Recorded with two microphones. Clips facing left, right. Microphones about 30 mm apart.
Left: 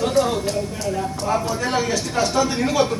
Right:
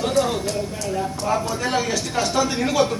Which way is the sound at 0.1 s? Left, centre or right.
Centre.